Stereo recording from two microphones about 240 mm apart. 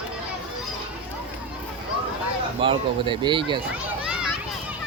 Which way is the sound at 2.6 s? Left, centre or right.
Right.